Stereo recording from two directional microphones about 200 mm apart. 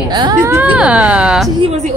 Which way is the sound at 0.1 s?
20° right (ahead or behind).